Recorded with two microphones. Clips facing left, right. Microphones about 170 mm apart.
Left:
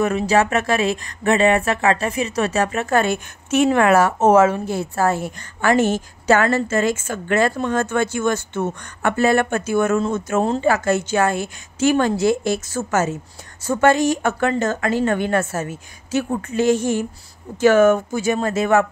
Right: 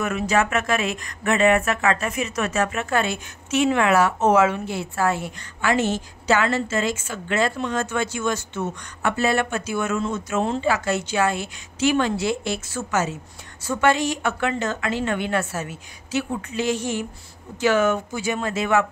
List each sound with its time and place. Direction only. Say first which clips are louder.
0.0 s speech: left 4 dB; 35° left (ahead or behind)